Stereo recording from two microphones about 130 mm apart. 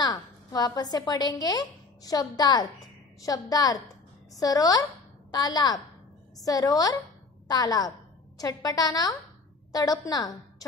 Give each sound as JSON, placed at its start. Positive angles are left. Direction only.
{"t": 0.0, "sound": "a woman's voice", "side_deg": 30}